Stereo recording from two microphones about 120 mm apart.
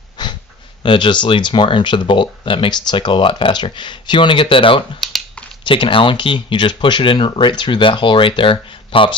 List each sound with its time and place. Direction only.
0.8 s speech: 40° left (ahead or behind)